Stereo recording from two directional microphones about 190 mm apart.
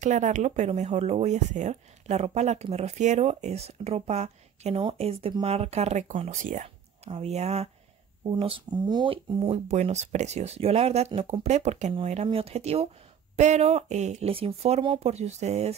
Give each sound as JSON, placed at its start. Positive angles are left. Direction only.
{"t": 0.0, "sound": "speech", "side_deg": -40}